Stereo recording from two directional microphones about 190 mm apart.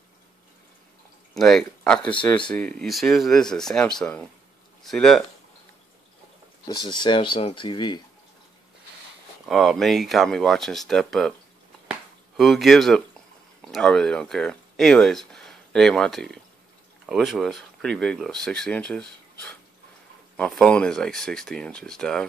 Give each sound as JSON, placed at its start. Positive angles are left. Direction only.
{"t": 1.3, "sound": "speech", "side_deg": 0}
{"t": 6.7, "sound": "speech", "side_deg": 20}
{"t": 9.5, "sound": "speech", "side_deg": 0}
{"t": 11.9, "sound": "a sound", "side_deg": 0}
{"t": 13.6, "sound": "speech", "side_deg": 5}